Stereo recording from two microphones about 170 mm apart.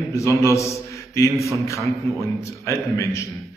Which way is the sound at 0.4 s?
15° left (ahead or behind).